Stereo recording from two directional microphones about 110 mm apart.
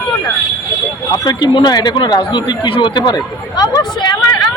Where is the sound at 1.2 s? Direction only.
40° left (ahead or behind).